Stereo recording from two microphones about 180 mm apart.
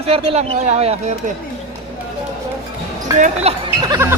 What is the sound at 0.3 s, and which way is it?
Speech, 35° right (ahead or behind).